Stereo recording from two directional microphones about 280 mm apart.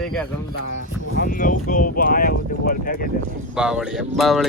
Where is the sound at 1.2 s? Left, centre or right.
Left.